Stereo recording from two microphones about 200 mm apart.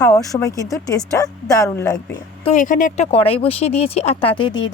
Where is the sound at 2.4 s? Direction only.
35° left (ahead or behind).